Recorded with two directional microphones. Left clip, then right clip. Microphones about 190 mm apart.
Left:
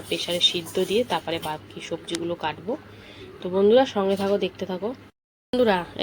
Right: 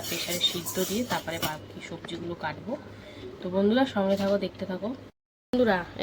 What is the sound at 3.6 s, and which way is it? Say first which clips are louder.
Speech: left 7 dB; 15° left (ahead or behind).